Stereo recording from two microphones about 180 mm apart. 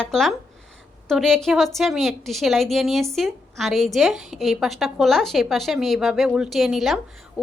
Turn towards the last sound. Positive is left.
turn(degrees=-5)  # may be behind; listen again after turning